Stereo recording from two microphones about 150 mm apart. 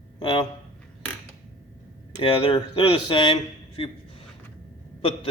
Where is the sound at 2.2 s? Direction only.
35° left (ahead or behind).